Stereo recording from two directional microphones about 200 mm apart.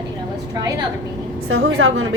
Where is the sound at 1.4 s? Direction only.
90° right.